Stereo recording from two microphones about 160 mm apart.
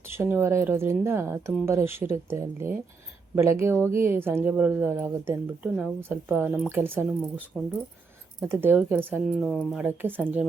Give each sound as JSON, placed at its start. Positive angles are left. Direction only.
{"t": 0.1, "sound": "speech", "side_deg": -10}
{"t": 8.4, "sound": "speech", "side_deg": -10}
{"t": 9.2, "sound": "speech", "side_deg": 0}
{"t": 9.8, "sound": "speech", "side_deg": -10}